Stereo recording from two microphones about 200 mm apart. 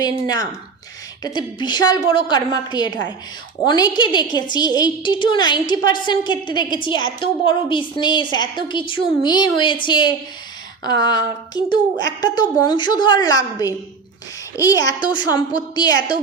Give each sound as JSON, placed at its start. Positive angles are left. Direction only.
{"t": 0.0, "sound": "a woman's voice", "side_deg": 20}